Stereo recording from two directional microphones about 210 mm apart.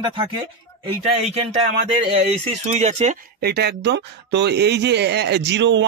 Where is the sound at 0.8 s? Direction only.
30° right (ahead or behind).